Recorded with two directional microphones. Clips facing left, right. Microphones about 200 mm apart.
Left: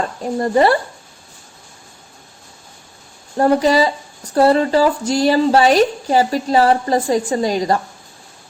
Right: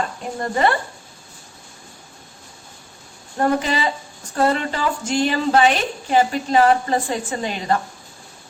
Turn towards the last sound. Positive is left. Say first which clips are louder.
# left 6 dB
turn(degrees=35)  # may be behind; listen again after turning